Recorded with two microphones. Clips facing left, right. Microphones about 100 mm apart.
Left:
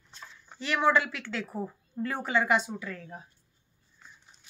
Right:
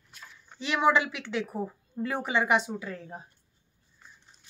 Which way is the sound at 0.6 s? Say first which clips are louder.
Right 1 dB; 15° right (ahead or behind).